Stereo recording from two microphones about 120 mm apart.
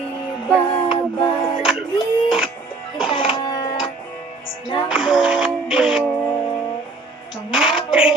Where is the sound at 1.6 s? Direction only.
5° right (ahead or behind).